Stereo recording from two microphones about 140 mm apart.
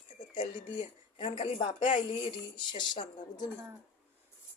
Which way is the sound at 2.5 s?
35° left (ahead or behind).